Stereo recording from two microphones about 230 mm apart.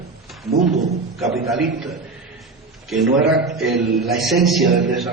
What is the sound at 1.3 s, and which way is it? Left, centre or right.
A man's voice, centre.